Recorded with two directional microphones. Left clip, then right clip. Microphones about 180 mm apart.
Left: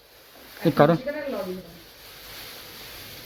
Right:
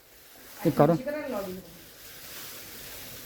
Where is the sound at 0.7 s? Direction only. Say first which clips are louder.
Left 4 dB; 5° right (ahead or behind).